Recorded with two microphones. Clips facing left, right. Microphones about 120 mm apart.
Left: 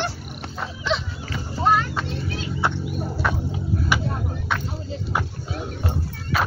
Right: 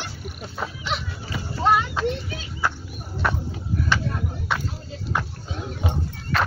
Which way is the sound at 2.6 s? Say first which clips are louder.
Left 1 dB; 25° left (ahead or behind).